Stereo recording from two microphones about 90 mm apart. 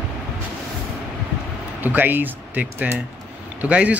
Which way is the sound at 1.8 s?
20° right (ahead or behind).